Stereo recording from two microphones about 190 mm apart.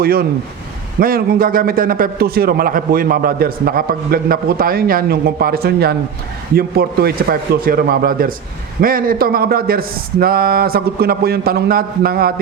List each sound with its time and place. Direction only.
0.0 s a man's voice: 50° right (ahead or behind)